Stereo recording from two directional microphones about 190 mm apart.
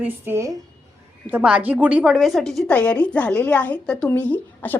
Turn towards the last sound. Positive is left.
turn(degrees=10)  # may be behind; listen again after turning